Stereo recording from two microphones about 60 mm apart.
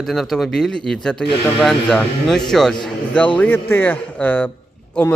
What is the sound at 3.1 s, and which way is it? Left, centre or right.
Speech, left.